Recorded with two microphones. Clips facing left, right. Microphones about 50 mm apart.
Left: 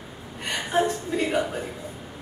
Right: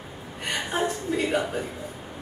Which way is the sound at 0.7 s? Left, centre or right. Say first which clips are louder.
Left 4 dB; centre.